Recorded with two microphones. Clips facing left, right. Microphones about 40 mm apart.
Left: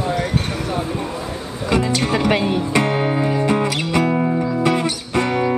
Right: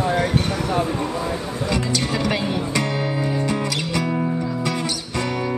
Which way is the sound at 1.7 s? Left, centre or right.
Left.